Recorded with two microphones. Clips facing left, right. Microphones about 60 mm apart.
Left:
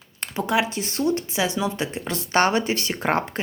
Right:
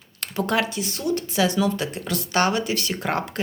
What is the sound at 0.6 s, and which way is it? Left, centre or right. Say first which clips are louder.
Speech: left 2 dB; left.